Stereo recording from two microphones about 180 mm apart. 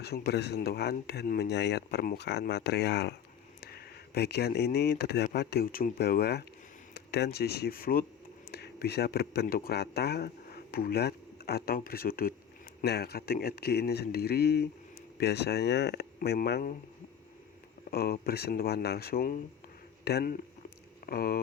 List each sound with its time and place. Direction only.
0.0 s speech: 60° left (ahead or behind)
17.9 s speech: 60° left (ahead or behind)